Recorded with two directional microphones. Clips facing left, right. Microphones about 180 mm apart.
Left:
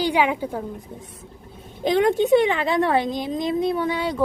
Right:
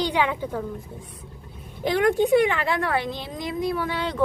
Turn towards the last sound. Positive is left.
turn(degrees=10)  # may be behind; listen again after turning